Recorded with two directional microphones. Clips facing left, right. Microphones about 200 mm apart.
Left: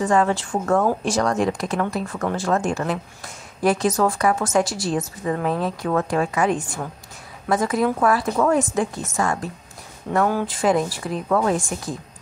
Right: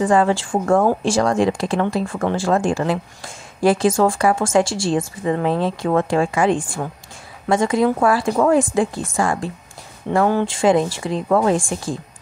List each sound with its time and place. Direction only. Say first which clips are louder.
0.0 s a woman's voice: right 3 dB; 35° right (ahead or behind)